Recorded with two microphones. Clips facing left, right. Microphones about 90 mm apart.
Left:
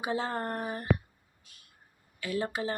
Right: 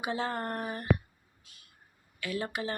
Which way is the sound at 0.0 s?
30° left (ahead or behind).